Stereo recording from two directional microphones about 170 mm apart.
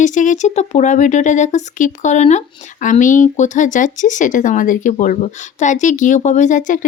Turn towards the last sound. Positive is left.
turn(degrees=50)  # may be behind; listen again after turning